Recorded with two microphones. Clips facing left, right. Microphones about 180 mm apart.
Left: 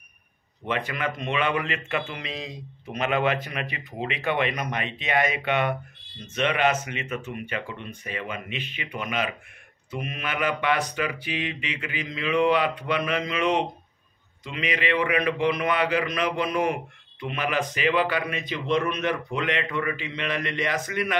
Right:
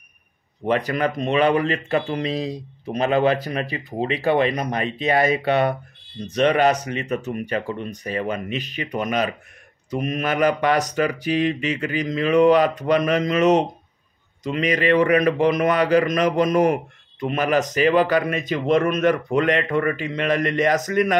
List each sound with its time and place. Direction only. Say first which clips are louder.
0.7 s a man's voice: right 7 dB; 40° right (ahead or behind)